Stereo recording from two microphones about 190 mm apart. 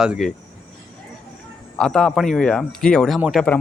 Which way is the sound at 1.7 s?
5° left (ahead or behind).